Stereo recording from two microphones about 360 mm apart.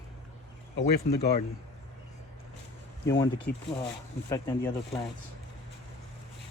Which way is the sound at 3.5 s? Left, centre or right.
Left.